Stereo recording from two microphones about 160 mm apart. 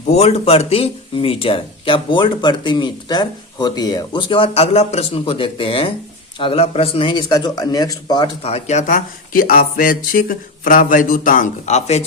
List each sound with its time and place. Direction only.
0.1 s speech: 40° left (ahead or behind)
8.4 s speech: 40° left (ahead or behind)